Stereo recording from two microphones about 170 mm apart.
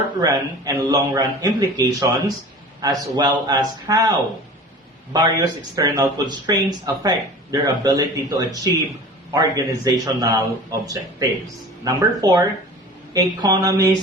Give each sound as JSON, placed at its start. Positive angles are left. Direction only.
{"t": 0.2, "sound": "a man's voice", "side_deg": -20}
{"t": 5.1, "sound": "a man's voice", "side_deg": -25}